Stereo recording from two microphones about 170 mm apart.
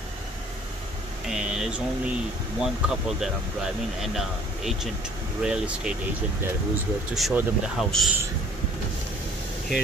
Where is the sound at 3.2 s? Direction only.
Centre (ahead or behind).